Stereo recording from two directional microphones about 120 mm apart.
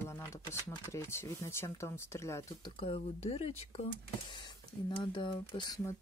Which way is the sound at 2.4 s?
50° left (ahead or behind).